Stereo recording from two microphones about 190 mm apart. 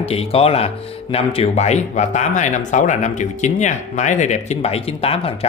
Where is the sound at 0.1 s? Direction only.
30° left (ahead or behind).